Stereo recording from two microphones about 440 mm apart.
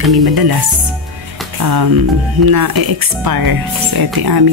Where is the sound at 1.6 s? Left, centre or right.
Right.